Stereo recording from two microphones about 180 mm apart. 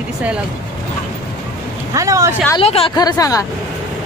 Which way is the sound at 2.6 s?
30° left (ahead or behind).